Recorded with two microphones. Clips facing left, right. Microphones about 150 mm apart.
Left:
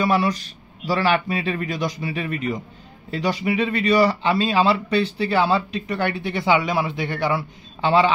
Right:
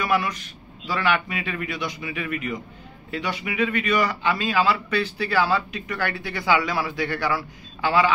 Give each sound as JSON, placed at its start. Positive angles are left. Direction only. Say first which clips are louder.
{"t": 0.0, "sound": "a man's voice", "louder": "left 4 dB", "side_deg": 30}